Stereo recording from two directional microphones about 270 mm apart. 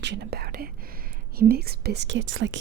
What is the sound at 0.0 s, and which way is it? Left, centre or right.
Speech, right.